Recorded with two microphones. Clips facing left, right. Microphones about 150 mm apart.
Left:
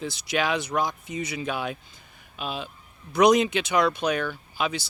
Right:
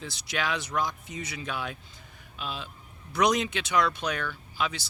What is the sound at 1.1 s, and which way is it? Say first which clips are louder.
Speech: left 6 dB; 10° left (ahead or behind).